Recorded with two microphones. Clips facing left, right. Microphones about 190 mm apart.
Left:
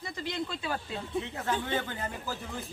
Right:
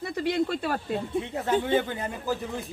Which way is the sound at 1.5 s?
20° right (ahead or behind).